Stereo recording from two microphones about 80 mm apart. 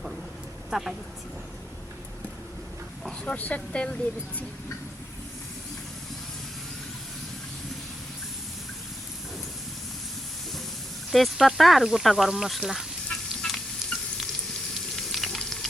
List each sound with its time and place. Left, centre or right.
0.7 s a woman's voice: centre
3.2 s speech: centre
11.1 s speech: centre
13.5 s stir: centre
14.9 s frying: centre